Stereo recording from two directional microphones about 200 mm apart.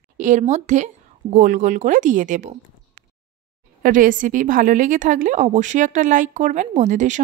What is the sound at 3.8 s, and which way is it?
Speech, 40° right (ahead or behind).